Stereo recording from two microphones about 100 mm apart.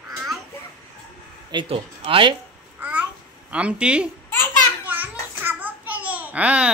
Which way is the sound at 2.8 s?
15° right (ahead or behind).